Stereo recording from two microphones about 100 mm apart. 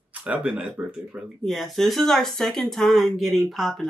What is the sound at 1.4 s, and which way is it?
Speech, centre (ahead or behind).